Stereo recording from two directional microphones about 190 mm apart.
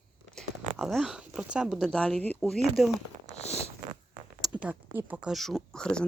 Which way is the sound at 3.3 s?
35° left (ahead or behind).